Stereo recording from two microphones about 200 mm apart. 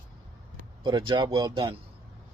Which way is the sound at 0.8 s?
25° right (ahead or behind).